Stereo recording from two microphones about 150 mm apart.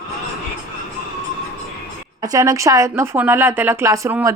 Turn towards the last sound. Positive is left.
turn(degrees=-20)  # may be behind; listen again after turning